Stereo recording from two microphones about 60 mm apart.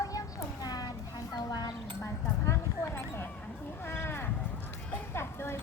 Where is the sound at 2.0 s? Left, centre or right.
Left.